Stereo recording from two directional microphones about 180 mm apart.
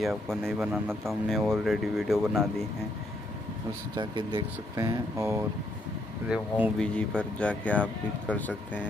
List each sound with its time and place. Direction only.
0.0 s speech: centre (ahead or behind)
3.9 s speech: 25° right (ahead or behind)
6.2 s speech: 5° right (ahead or behind)
6.8 s speech: 5° left (ahead or behind)